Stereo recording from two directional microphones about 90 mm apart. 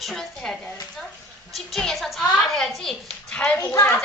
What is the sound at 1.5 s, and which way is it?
A woman's voice, centre (ahead or behind).